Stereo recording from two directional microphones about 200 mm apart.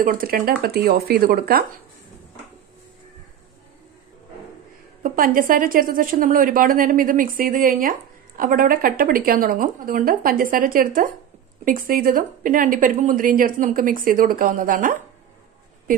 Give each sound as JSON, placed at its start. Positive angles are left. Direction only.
{"t": 0.0, "sound": "speech", "side_deg": -45}
{"t": 5.0, "sound": "speech", "side_deg": -45}